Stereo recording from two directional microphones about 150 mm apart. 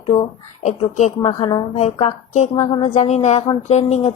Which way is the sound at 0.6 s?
50° left (ahead or behind).